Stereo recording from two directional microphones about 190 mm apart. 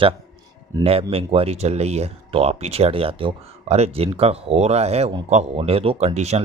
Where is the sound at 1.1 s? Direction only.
30° right (ahead or behind).